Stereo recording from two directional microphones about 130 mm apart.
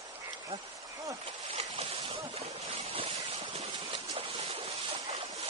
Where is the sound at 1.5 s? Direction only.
55° right (ahead or behind).